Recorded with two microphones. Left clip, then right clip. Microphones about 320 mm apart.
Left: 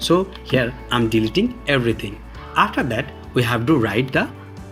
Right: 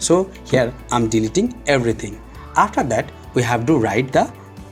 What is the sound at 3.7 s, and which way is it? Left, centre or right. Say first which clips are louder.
Speech: right 1 dB; centre.